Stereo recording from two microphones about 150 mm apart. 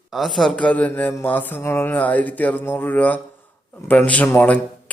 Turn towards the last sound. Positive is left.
turn(degrees=10)  # may be behind; listen again after turning